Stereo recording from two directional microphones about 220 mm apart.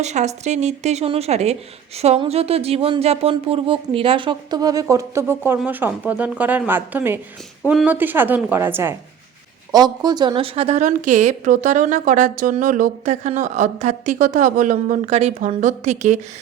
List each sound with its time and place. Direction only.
0.0 s a woman's voice: 30° right (ahead or behind)